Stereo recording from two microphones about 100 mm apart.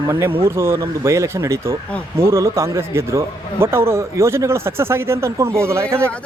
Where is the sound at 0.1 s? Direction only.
25° right (ahead or behind).